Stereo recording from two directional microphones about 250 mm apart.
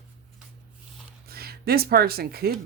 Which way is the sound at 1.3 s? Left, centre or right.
Right.